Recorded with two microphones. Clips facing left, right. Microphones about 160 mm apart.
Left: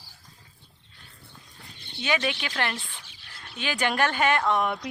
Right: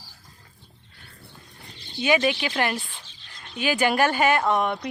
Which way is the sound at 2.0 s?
10° right (ahead or behind).